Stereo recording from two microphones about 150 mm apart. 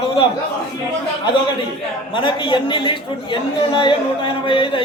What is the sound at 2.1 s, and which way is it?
A man's voice, 35° left (ahead or behind).